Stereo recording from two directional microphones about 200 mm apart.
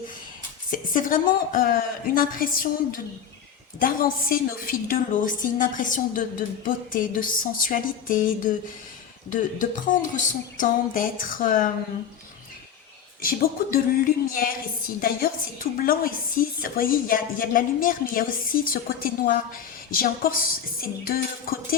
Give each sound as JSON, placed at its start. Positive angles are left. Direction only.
{"t": 0.7, "sound": "a woman's voice", "side_deg": 45}
{"t": 13.2, "sound": "a woman's voice", "side_deg": 45}